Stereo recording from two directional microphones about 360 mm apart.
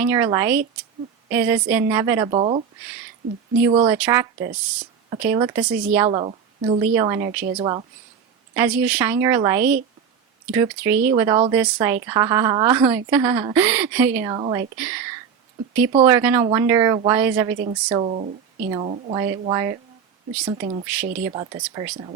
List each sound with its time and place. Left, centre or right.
0.0 s a woman's voice: centre
3.6 s a woman's voice: centre
10.9 s speech: right
11.2 s a woman's voice: centre
21.1 s speech: right
21.8 s a woman's voice: centre